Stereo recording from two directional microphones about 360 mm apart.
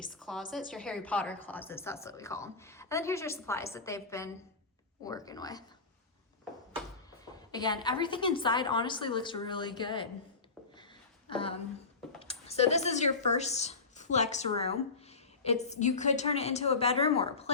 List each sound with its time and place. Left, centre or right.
0.0 s a woman's voice: centre
7.5 s a woman's voice: centre
11.3 s a woman's voice: centre